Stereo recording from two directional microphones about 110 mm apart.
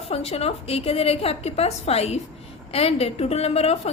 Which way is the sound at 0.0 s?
65° left (ahead or behind).